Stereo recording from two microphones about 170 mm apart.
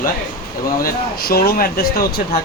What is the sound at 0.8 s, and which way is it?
Speech, 65° left (ahead or behind).